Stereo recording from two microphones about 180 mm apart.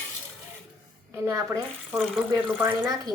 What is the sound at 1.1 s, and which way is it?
Speech, 15° right (ahead or behind).